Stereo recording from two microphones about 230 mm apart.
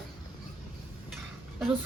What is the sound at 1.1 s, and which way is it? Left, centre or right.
Dishes, centre.